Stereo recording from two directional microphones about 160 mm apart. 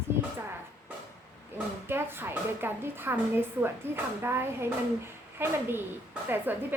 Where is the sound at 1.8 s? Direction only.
15° right (ahead or behind).